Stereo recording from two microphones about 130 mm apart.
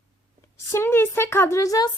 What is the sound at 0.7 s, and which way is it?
Speech, 15° left (ahead or behind).